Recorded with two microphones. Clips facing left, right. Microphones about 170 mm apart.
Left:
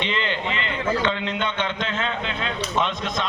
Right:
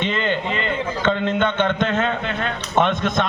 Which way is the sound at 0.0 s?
45° right (ahead or behind).